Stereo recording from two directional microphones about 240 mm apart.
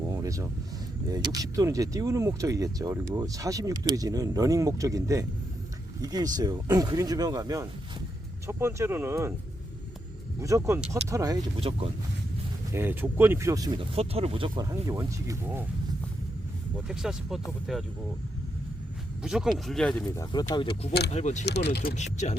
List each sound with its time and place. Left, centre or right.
0.2 s a sound: centre
1.1 s speech: centre
10.4 s speech: centre
12.7 s speech: centre
16.9 s speech: centre
19.2 s speech: centre
20.5 s speech: left
21.4 s speech: left
21.9 s speech: left